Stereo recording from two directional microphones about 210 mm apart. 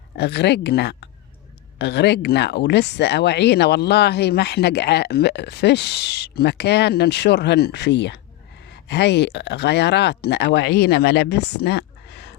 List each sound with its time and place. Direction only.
0.2 s speech: 55° left (ahead or behind)